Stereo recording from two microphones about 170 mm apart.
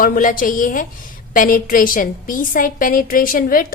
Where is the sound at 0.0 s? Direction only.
55° left (ahead or behind).